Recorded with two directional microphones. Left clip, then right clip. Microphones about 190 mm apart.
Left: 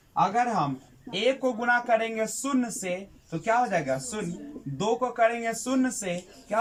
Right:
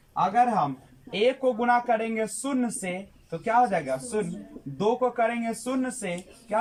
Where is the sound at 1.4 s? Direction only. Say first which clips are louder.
Right 2 dB; 10° right (ahead or behind).